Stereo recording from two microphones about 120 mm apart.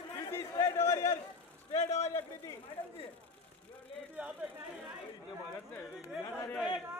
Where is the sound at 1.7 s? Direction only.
65° left (ahead or behind).